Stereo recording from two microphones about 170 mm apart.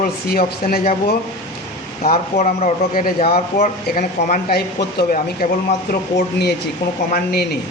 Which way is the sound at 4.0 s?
65° left (ahead or behind).